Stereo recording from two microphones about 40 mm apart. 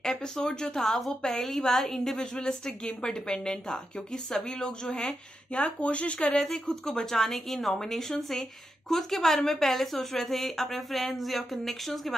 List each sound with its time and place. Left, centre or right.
0.0 s a sound: centre
0.5 s speech: centre
5.8 s speech: left
6.5 s speech: centre